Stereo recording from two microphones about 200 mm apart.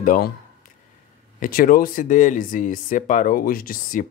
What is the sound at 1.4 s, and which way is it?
Speech, 45° left (ahead or behind).